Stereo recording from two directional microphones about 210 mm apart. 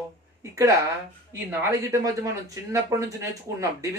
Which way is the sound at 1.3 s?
10° right (ahead or behind).